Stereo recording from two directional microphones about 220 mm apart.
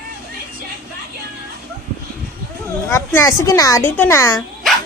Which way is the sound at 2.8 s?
10° left (ahead or behind).